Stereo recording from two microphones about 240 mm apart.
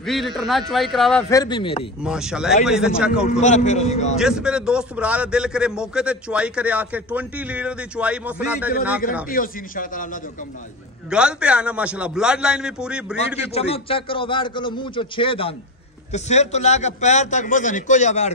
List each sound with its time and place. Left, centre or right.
0.0 s a man's voice: centre
1.3 s a man's voice: centre
2.0 s a man's voice: centre
3.3 s a man's voice: left
4.2 s a man's voice: centre
9.3 s speech: left
11.1 s a man's voice: centre
13.5 s a man's voice: left